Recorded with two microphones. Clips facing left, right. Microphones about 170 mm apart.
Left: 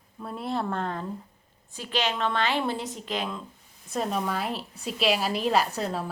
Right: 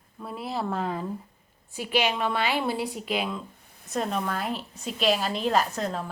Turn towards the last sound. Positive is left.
turn(degrees=5)  # may be behind; listen again after turning